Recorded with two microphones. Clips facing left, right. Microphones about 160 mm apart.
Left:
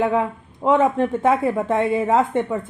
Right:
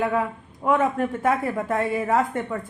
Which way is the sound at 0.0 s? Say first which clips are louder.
Left 4 dB; 25° left (ahead or behind).